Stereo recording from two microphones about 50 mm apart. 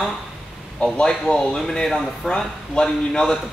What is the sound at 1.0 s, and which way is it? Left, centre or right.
Speech, centre.